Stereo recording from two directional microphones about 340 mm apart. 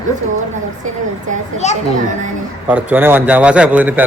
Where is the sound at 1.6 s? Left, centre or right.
Centre.